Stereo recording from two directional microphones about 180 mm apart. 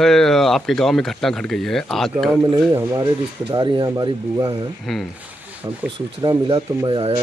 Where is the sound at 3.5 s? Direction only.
25° right (ahead or behind).